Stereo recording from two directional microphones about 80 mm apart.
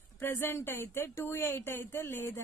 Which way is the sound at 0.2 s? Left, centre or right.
Left.